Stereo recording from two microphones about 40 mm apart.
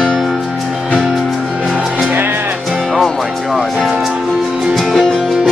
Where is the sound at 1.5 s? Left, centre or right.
Right.